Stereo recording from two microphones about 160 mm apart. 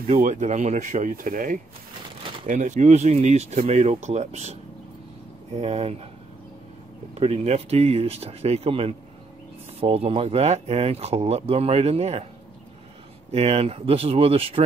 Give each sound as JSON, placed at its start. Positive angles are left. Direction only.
{"t": 0.0, "sound": "speech", "side_deg": -45}
{"t": 7.2, "sound": "speech", "side_deg": -40}
{"t": 13.3, "sound": "speech", "side_deg": -40}